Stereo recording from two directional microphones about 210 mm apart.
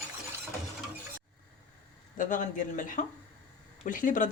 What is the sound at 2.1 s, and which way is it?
Speech, 40° left (ahead or behind).